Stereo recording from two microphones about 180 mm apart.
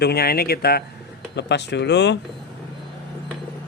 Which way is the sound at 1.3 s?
70° left (ahead or behind).